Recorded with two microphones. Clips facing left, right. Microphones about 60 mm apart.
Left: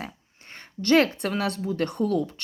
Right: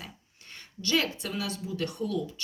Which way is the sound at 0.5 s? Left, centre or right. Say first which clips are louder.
Left 9 dB; left.